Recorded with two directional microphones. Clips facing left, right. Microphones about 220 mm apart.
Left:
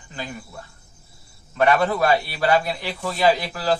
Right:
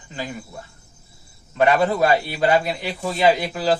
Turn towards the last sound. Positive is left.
turn(degrees=-20)  # may be behind; listen again after turning